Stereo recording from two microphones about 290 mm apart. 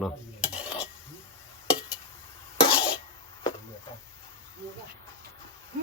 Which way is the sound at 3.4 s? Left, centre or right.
Centre.